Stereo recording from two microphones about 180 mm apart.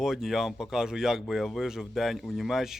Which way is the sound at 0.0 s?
Centre (ahead or behind).